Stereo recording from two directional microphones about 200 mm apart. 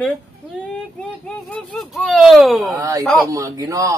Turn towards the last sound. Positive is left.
turn(degrees=-15)  # may be behind; listen again after turning